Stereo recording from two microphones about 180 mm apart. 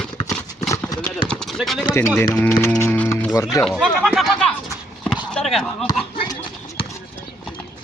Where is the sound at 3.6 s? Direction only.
5° right (ahead or behind).